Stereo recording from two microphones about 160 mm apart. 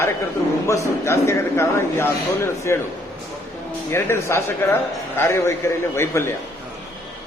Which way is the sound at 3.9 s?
15° left (ahead or behind).